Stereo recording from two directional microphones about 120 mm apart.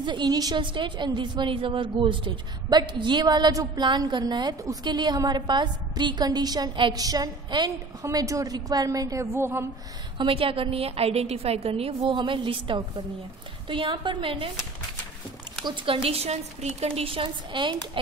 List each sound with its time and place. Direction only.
0.0 s a woman's voice: 40° right (ahead or behind); by 9.7 s 20° right (ahead or behind)
10.1 s a woman's voice: 45° right (ahead or behind)
15.6 s a woman's voice: 45° right (ahead or behind)